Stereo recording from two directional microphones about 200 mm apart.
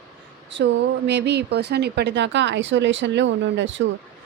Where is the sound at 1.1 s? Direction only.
60° right (ahead or behind).